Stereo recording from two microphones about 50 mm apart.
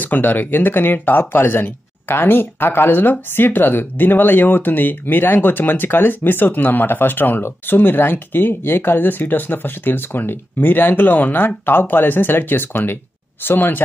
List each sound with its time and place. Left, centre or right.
0.0 s speech: left